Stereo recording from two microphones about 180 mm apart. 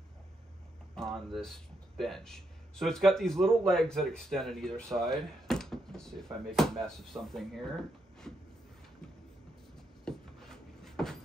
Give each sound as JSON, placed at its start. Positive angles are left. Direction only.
{"t": 0.9, "sound": "speech", "side_deg": 0}
{"t": 4.9, "sound": "drawer open or close", "side_deg": 0}
{"t": 6.5, "sound": "speech", "side_deg": 0}
{"t": 10.0, "sound": "a sound", "side_deg": 0}